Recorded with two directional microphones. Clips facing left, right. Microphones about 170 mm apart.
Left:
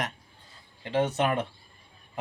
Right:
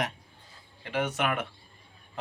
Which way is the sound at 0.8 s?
25° left (ahead or behind).